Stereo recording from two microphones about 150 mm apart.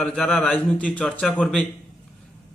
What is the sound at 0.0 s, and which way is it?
A man's voice, 5° left (ahead or behind).